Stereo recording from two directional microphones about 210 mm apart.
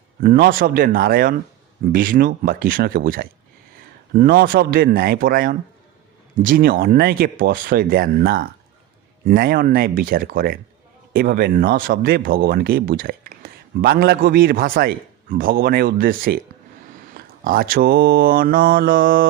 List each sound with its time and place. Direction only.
0.2 s speech: 45° right (ahead or behind)